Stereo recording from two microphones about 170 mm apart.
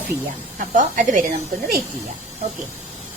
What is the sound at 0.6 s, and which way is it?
Speech, 50° right (ahead or behind).